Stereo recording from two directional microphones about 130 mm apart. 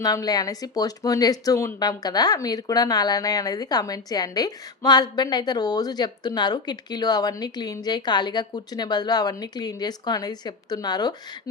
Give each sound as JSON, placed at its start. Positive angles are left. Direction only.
{"t": 0.0, "sound": "speech", "side_deg": 30}